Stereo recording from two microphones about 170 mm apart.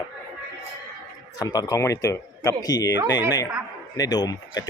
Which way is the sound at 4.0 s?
20° left (ahead or behind).